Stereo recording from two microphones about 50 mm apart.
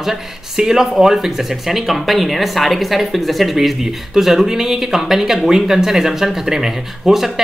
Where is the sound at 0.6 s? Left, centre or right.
Centre.